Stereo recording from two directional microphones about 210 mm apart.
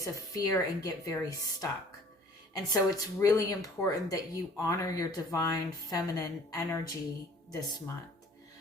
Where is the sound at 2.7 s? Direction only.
15° left (ahead or behind).